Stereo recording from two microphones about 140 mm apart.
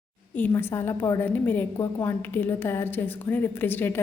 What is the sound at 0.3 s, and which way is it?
A woman's voice, 15° left (ahead or behind).